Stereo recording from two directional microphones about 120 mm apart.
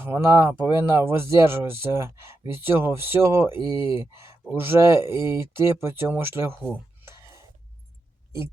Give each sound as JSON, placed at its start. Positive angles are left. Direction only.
{"t": 0.0, "sound": "speech", "side_deg": -20}
{"t": 7.0, "sound": "whispering", "side_deg": -20}